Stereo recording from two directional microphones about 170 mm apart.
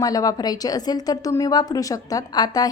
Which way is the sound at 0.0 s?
20° left (ahead or behind).